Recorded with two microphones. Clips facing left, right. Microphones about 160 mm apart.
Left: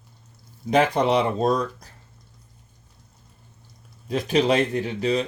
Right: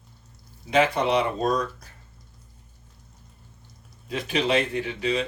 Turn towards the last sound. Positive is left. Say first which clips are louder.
# left 3 dB
turn(degrees=40)  # may be behind; listen again after turning